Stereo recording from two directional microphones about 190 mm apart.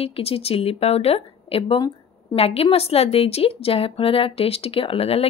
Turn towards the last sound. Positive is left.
turn(degrees=30)  # may be behind; listen again after turning